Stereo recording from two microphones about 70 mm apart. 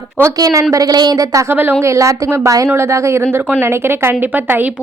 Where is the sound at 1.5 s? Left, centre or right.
Right.